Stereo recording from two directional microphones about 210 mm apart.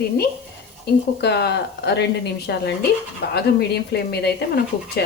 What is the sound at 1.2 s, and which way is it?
A woman's voice, 50° left (ahead or behind).